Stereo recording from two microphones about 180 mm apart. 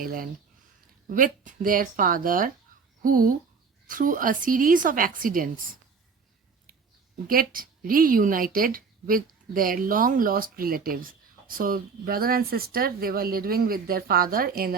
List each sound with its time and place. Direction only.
0.0 s a woman's voice: 55° right (ahead or behind)
7.3 s a woman's voice: 55° right (ahead or behind)